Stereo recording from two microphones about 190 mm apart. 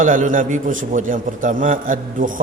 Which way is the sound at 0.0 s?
45° right (ahead or behind).